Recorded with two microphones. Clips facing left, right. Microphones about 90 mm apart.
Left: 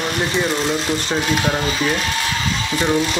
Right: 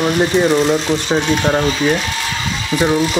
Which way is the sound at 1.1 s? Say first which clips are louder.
Right 3 dB; centre (ahead or behind).